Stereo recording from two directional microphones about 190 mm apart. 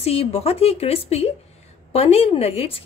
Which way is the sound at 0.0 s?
30° left (ahead or behind).